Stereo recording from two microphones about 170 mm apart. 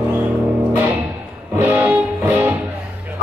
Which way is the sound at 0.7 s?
10° right (ahead or behind).